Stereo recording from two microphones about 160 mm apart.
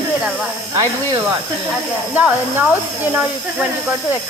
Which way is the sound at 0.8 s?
25° right (ahead or behind).